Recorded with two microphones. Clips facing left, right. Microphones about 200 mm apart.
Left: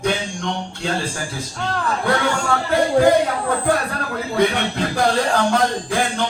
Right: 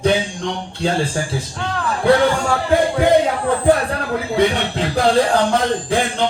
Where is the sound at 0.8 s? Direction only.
30° right (ahead or behind).